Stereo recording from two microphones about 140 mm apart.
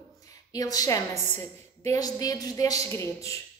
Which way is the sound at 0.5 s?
25° left (ahead or behind).